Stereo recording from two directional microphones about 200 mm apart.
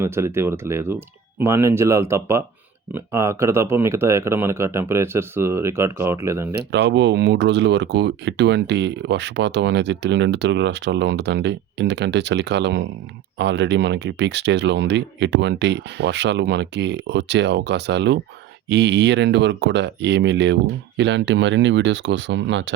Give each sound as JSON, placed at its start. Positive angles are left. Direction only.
{"t": 0.0, "sound": "speech", "side_deg": -10}
{"t": 6.6, "sound": "speech", "side_deg": -55}